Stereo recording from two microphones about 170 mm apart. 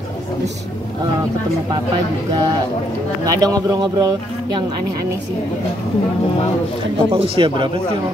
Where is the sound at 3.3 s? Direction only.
20° right (ahead or behind).